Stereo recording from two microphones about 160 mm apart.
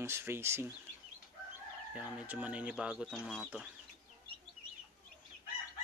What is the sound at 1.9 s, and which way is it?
Speech, 10° right (ahead or behind).